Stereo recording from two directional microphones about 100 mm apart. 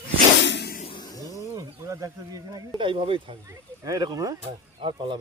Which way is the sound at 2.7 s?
55° right (ahead or behind).